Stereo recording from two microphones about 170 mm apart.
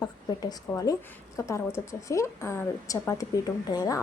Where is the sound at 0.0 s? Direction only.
20° left (ahead or behind).